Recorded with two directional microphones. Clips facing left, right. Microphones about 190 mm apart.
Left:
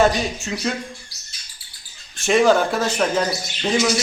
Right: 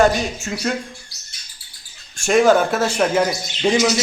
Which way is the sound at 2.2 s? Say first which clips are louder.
Right 2 dB; centre (ahead or behind).